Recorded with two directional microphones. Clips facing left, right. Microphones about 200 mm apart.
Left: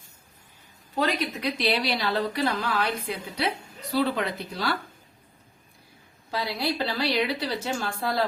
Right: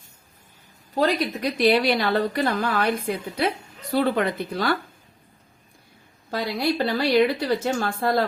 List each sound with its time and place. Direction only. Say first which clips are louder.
0.9 s a woman's voice: right 4 dB; 40° right (ahead or behind)
6.3 s a woman's voice: right 4 dB; 50° right (ahead or behind)